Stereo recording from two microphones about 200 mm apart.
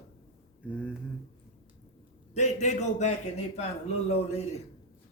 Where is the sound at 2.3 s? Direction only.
35° left (ahead or behind).